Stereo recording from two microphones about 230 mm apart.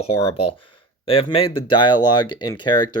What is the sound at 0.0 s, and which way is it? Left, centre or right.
Speech, left.